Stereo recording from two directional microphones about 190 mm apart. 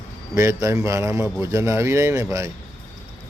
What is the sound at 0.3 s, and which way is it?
Speech, 15° right (ahead or behind).